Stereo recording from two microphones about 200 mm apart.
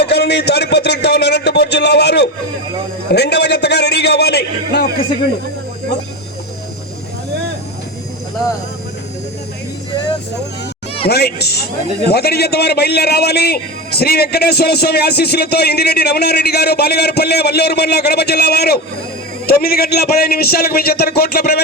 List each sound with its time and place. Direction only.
0.0 s speech: 55° left (ahead or behind)
11.1 s a man's voice: 55° left (ahead or behind)